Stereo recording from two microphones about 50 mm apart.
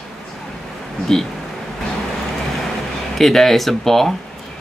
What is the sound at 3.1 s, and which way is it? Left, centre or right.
Speech, centre.